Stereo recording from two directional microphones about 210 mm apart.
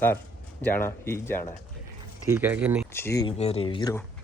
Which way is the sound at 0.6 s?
10° left (ahead or behind).